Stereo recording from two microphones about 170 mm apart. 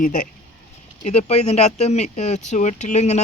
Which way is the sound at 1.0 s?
40° left (ahead or behind).